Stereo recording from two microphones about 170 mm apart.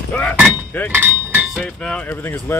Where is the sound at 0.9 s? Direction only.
10° right (ahead or behind).